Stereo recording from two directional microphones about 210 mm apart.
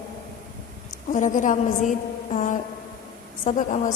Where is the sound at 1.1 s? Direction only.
40° left (ahead or behind).